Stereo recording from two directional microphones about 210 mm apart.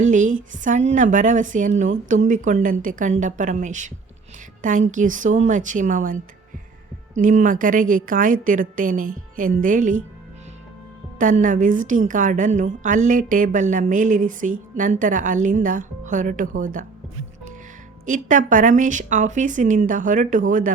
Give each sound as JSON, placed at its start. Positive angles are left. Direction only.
{"t": 0.0, "sound": "a woman's voice", "side_deg": -35}
{"t": 7.2, "sound": "a woman's voice", "side_deg": -40}
{"t": 11.2, "sound": "a woman's voice", "side_deg": -40}
{"t": 18.0, "sound": "a woman's voice", "side_deg": -40}